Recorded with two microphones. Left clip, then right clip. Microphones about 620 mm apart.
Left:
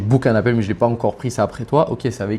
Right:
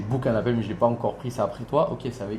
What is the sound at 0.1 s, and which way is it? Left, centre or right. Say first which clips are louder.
Speech: left 8 dB; left.